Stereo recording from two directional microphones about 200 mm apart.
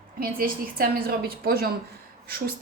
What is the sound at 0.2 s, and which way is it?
A woman's voice, 45° right (ahead or behind).